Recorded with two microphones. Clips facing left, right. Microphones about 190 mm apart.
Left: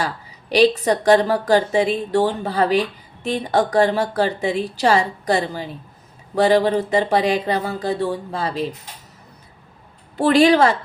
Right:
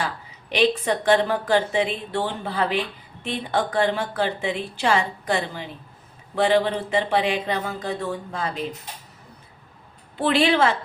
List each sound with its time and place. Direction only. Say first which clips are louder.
0.5 s a woman's voice: left 5 dB; 40° left (ahead or behind)
10.2 s a woman's voice: left 6 dB; 40° left (ahead or behind)